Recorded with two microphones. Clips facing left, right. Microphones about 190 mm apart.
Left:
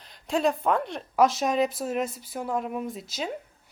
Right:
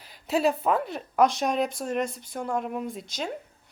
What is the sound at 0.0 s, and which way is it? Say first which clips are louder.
Speech: right 1 dB; 5° right (ahead or behind).